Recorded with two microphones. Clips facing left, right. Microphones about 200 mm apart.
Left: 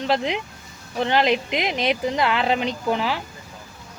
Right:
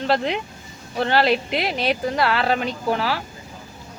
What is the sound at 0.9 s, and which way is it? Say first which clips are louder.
Speech: right 1 dB; 15° left (ahead or behind).